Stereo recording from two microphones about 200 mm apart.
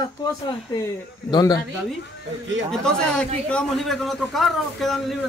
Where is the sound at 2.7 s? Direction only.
5° left (ahead or behind).